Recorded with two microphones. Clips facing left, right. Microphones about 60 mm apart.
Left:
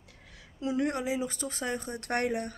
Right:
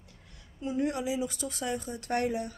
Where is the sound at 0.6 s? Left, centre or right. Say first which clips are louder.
Left 1 dB; left.